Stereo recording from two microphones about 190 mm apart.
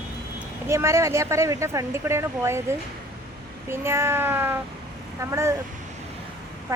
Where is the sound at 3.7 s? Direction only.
15° right (ahead or behind).